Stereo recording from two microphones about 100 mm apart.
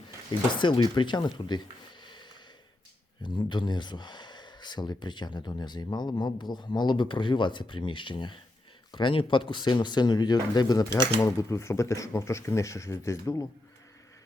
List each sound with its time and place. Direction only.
0.3 s speech: 50° left (ahead or behind)
2.0 s snort: 50° left (ahead or behind)
3.2 s speech: 50° left (ahead or behind); by 13.5 s 30° left (ahead or behind)